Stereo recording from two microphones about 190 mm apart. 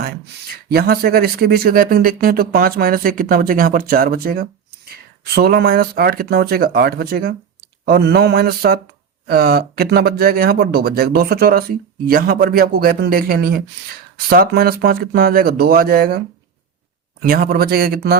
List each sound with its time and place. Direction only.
0.7 s speech: 55° right (ahead or behind)
7.9 s a sound: 60° right (ahead or behind)
9.2 s speech: 55° right (ahead or behind)
17.2 s speech: 50° right (ahead or behind)